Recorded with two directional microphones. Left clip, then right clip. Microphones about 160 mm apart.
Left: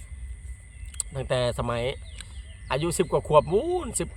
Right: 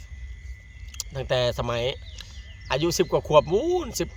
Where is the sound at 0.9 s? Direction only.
20° right (ahead or behind).